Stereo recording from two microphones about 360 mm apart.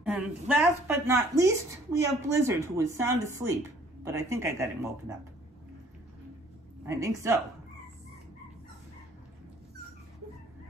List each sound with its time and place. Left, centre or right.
0.0 s speech: centre
6.9 s speech: centre